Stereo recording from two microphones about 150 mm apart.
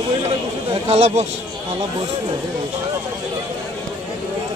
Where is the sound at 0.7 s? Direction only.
40° right (ahead or behind).